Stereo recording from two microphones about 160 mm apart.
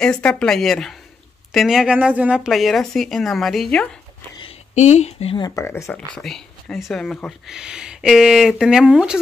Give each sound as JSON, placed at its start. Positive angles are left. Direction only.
{"t": 0.0, "sound": "speech", "side_deg": 5}
{"t": 4.7, "sound": "speech", "side_deg": 45}
{"t": 5.4, "sound": "speech", "side_deg": 15}
{"t": 6.1, "sound": "speech", "side_deg": 5}